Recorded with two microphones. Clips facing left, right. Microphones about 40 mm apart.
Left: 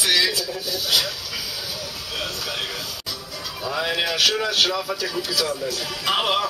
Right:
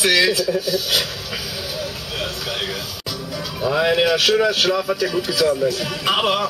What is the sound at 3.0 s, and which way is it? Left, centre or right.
Music, right.